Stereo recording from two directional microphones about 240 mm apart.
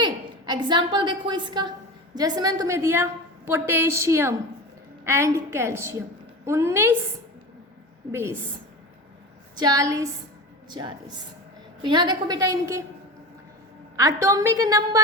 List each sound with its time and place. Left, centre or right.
0.0 s a woman's voice: centre
8.1 s a woman's voice: centre
9.6 s a woman's voice: centre
13.9 s a woman's voice: centre